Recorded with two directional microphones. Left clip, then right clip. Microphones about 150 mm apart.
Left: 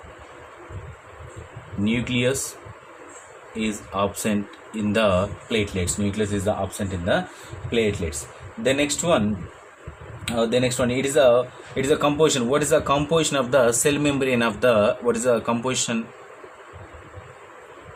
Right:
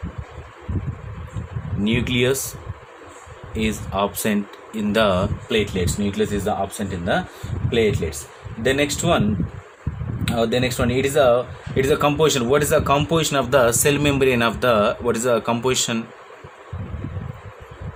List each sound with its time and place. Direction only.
1.8 s speech: 40° right (ahead or behind)
3.6 s speech: 45° right (ahead or behind)
10.2 s speech: 35° right (ahead or behind)